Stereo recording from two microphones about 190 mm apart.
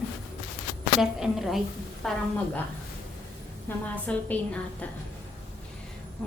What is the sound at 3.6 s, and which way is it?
Speech, 10° left (ahead or behind).